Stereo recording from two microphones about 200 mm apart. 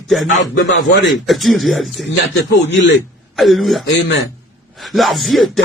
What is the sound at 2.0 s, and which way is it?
Speech, 60° left (ahead or behind).